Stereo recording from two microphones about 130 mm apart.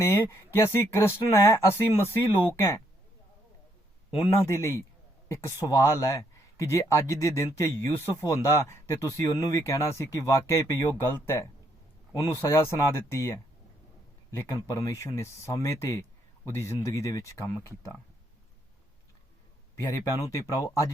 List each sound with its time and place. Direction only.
0.0 s speech: 20° left (ahead or behind)
4.3 s speech: 20° left (ahead or behind)